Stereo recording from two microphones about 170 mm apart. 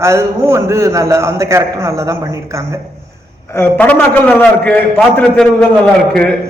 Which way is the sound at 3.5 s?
10° left (ahead or behind).